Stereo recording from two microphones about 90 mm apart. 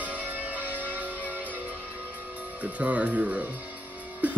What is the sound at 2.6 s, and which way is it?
Speech, 15° right (ahead or behind).